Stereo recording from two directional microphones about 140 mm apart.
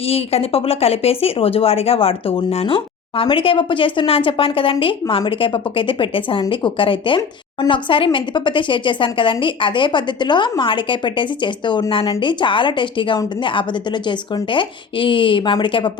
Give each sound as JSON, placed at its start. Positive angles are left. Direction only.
{"t": 0.1, "sound": "speech", "side_deg": 45}